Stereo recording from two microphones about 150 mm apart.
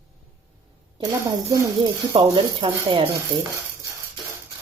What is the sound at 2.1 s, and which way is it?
Speech, 40° right (ahead or behind).